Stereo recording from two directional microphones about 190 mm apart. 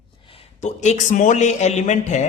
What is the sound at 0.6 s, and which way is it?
A man's voice, 40° left (ahead or behind).